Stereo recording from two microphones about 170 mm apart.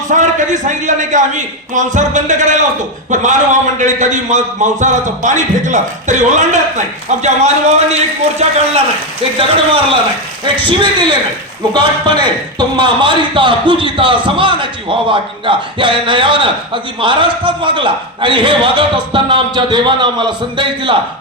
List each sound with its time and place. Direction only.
0.1 s a man's voice: 45° right (ahead or behind)
10.7 s speech: 30° right (ahead or behind)